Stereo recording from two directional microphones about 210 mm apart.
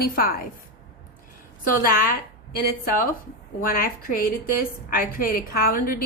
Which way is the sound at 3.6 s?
45° left (ahead or behind).